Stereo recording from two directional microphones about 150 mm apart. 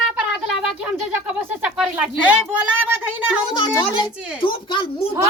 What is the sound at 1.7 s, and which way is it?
Speech, 5° right (ahead or behind).